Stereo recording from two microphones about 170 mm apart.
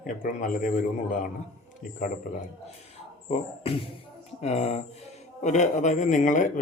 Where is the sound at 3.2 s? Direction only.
35° left (ahead or behind).